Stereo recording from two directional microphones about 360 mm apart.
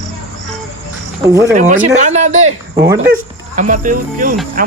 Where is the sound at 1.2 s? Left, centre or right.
Centre.